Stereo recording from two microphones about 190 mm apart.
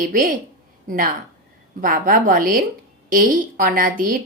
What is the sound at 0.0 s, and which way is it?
A woman's voice, 45° right (ahead or behind).